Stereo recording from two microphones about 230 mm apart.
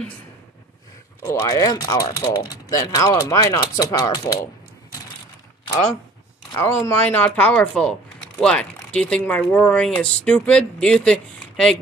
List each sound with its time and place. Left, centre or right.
1.2 s speech: centre
6.5 s speech: centre